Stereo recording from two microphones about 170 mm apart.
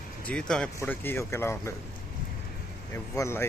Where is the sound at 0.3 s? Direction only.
5° left (ahead or behind).